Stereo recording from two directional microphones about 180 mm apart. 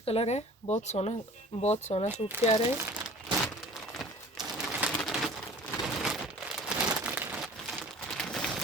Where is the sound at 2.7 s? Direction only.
10° right (ahead or behind).